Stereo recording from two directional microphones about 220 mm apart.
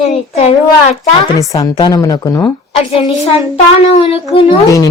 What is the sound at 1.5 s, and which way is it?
A woman's voice, 15° left (ahead or behind).